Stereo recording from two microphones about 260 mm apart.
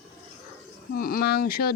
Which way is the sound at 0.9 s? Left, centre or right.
Left.